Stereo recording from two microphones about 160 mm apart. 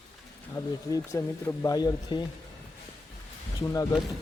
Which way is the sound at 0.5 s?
20° left (ahead or behind).